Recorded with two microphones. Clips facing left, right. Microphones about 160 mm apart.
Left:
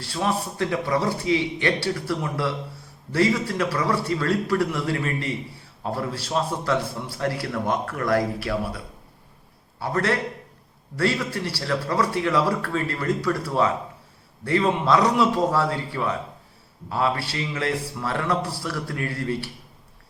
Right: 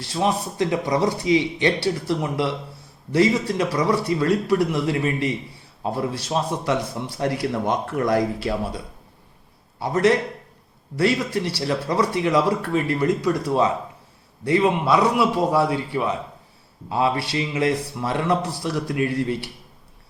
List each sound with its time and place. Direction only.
0.0 s a man's voice: 20° right (ahead or behind)
9.8 s a man's voice: 15° right (ahead or behind)